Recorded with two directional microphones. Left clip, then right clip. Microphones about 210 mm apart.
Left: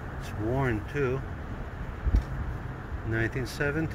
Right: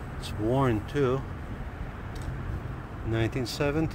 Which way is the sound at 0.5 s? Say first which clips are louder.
Right 3 dB; 25° right (ahead or behind).